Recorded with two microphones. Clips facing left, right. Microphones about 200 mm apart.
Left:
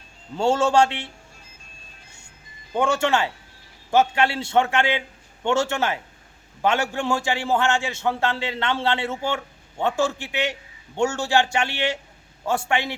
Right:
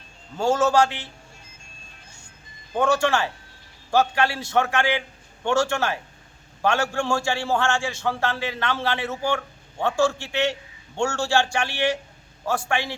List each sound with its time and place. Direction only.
0.3 s a man's voice: 30° left (ahead or behind)
2.7 s a man's voice: 25° left (ahead or behind)